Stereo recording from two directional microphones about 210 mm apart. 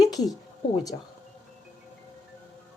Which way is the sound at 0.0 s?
Centre (ahead or behind).